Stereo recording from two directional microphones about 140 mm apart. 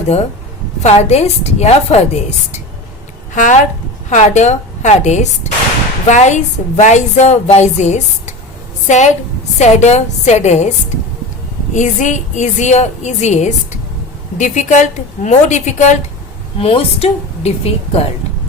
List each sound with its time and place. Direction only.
0.8 s a woman's voice: 50° left (ahead or behind)
3.3 s a woman's voice: 65° left (ahead or behind)
11.7 s a woman's voice: 60° left (ahead or behind)
16.6 s a woman's voice: 45° left (ahead or behind)